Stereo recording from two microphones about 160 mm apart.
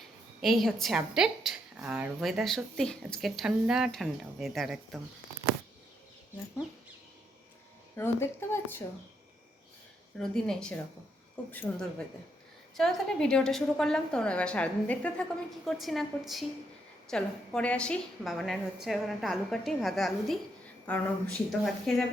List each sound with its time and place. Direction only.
0.4 s a woman's voice: centre (ahead or behind)
7.9 s speech: 15° left (ahead or behind)
10.2 s a woman's voice: 5° left (ahead or behind)